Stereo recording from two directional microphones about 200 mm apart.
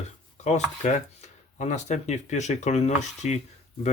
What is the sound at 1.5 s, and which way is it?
Speech, 35° left (ahead or behind).